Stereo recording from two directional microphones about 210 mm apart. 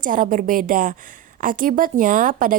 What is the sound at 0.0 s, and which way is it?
A woman's voice, 40° right (ahead or behind).